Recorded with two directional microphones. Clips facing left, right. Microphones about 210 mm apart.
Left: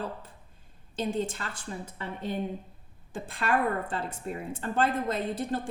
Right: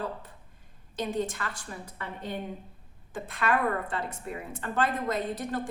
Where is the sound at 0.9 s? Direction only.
25° left (ahead or behind).